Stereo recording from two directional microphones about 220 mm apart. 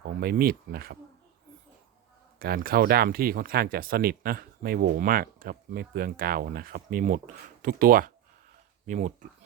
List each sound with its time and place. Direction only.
0.1 s speech: 45° right (ahead or behind)
2.4 s speech: 45° right (ahead or behind)